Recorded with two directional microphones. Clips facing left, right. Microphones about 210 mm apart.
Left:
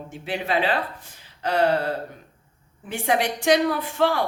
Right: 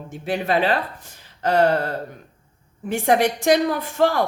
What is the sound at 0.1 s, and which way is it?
Speech, 45° right (ahead or behind).